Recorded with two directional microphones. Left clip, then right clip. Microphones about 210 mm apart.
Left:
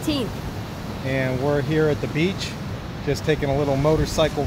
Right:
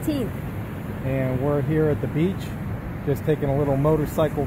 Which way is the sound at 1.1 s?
Centre (ahead or behind).